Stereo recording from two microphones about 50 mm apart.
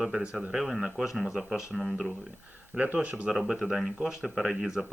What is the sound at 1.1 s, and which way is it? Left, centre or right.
Speech, centre.